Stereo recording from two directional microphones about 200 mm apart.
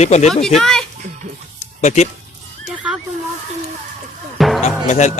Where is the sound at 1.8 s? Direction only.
35° left (ahead or behind).